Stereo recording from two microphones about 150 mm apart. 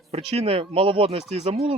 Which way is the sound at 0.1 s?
40° right (ahead or behind).